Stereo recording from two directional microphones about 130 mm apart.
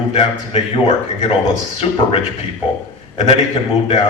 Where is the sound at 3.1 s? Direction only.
50° left (ahead or behind).